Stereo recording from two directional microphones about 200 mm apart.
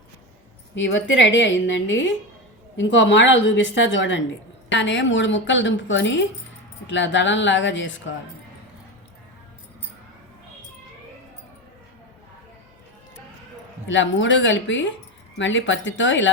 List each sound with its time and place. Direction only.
0.8 s a woman's voice: 70° left (ahead or behind)
13.8 s a woman's voice: 70° left (ahead or behind)